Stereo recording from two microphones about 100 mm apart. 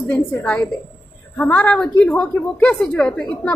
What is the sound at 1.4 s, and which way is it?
A woman's voice, 15° left (ahead or behind).